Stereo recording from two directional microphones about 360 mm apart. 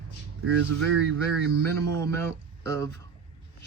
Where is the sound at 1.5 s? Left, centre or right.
Right.